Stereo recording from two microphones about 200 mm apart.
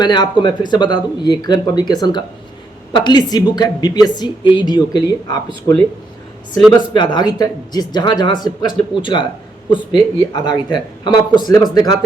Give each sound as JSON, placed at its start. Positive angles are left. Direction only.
{"t": 0.0, "sound": "speech", "side_deg": 20}
{"t": 6.9, "sound": "speech", "side_deg": 20}